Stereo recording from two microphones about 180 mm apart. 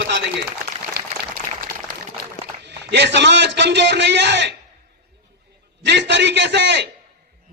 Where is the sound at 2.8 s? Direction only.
75° right (ahead or behind).